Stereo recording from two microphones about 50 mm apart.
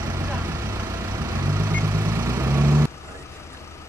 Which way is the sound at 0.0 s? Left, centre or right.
Right.